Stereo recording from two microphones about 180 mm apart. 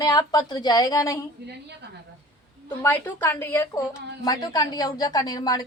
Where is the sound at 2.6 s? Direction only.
10° left (ahead or behind).